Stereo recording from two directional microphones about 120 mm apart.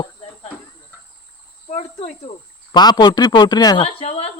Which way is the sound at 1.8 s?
60° left (ahead or behind).